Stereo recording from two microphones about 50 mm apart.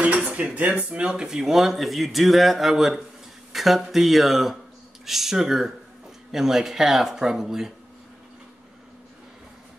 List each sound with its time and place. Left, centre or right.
0.3 s speech: right